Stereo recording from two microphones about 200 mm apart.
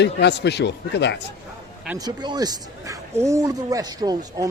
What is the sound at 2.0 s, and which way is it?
Speech, 20° right (ahead or behind).